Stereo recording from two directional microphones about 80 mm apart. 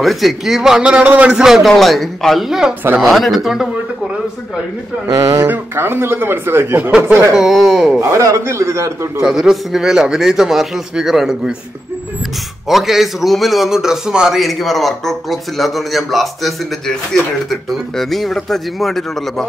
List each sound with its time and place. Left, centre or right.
0.0 s a man's voice: centre
1.3 s a man's voice: centre
5.0 s speech: right
5.5 s speech: right
7.3 s a man's voice: centre
8.0 s a man's voice: right
9.2 s a man's voice: centre
12.6 s a man's voice: centre